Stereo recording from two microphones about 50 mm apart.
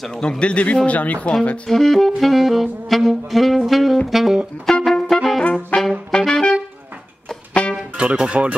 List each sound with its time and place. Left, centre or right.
0.2 s speech: left
1.7 s saxophone: centre
4.6 s music: centre
5.1 s trumpet: centre
5.4 s brass instrument: left
6.1 s music: centre
8.0 s speech: right